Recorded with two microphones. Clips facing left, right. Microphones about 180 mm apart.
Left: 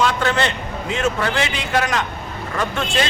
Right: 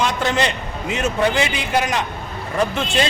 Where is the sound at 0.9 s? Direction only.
20° right (ahead or behind).